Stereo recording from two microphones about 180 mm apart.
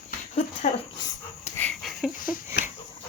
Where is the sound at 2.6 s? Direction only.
65° left (ahead or behind).